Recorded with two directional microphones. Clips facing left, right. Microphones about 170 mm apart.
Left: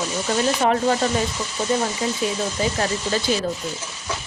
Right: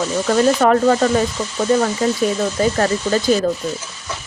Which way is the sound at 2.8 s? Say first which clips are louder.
Right 6 dB; 40° right (ahead or behind).